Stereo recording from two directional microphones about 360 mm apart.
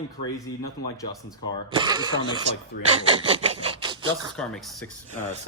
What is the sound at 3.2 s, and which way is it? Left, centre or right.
Speech, centre.